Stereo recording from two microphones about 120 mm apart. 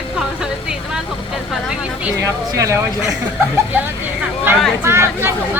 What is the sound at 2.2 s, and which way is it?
Speech, 25° right (ahead or behind).